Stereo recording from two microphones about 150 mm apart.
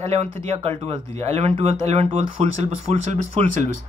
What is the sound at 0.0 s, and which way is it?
Speech, 45° right (ahead or behind).